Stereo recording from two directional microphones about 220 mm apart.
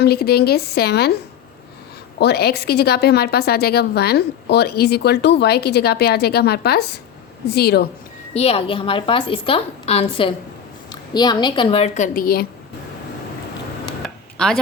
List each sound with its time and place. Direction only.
0.0 s a woman's voice: 45° left (ahead or behind)
8.3 s a woman's voice: 30° left (ahead or behind)
14.0 s a sound: 5° left (ahead or behind)